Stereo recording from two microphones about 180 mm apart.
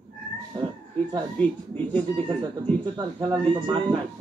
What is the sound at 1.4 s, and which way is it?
Speech, 10° left (ahead or behind).